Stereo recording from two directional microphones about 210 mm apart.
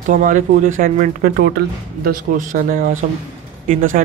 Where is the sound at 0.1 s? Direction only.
40° right (ahead or behind).